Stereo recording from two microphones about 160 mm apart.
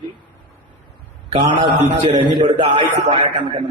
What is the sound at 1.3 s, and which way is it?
A man's voice, 30° right (ahead or behind).